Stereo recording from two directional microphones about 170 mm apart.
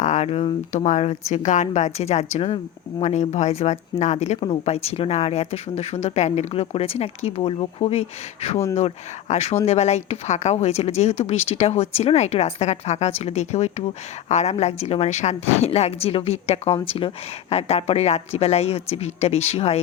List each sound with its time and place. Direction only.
0.0 s speech: 45° left (ahead or behind)